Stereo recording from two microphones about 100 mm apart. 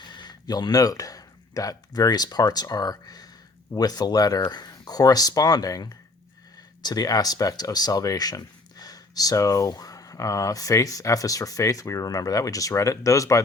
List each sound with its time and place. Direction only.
0.0 s speech: 50° left (ahead or behind)